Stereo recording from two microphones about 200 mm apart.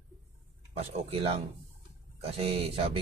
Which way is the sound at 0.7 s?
30° right (ahead or behind).